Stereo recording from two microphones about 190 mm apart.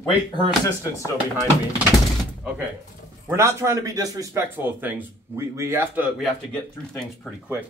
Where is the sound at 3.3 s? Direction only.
15° right (ahead or behind).